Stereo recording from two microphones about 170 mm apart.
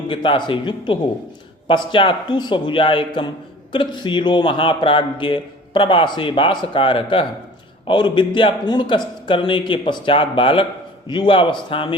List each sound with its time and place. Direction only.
0.1 s a man's voice: 30° left (ahead or behind)